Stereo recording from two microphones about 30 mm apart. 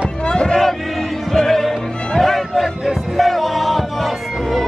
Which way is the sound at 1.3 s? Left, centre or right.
Centre.